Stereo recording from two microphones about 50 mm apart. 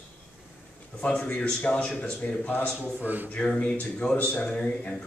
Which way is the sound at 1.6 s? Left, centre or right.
Left.